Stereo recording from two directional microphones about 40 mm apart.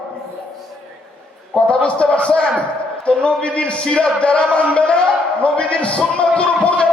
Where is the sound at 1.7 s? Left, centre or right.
Left.